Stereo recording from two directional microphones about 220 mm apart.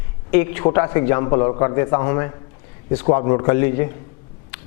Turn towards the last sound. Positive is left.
turn(degrees=15)  # may be behind; listen again after turning